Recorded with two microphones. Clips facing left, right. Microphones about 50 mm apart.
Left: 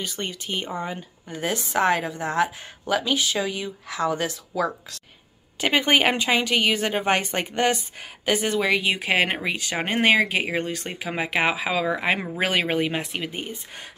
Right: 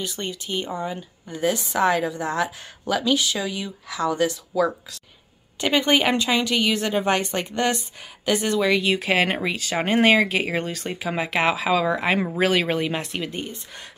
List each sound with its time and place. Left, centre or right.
0.0 s a woman's voice: left; by 13.8 s centre